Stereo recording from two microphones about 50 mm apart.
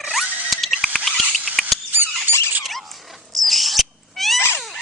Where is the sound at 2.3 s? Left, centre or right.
Right.